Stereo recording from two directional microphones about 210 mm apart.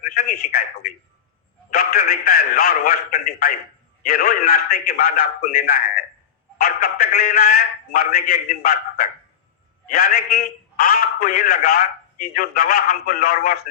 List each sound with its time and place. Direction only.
0.3 s a man's voice: 40° left (ahead or behind)